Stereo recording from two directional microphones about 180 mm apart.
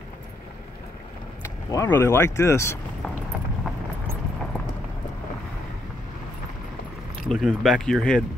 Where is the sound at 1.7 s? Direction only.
15° left (ahead or behind).